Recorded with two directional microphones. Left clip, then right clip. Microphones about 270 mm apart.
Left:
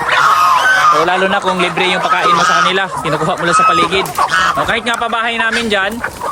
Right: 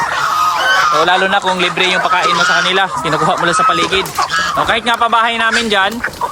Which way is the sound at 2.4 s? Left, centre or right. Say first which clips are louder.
Left 1 dB; centre.